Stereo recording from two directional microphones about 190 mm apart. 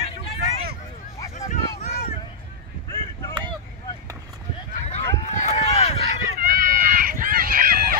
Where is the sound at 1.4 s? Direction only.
35° left (ahead or behind).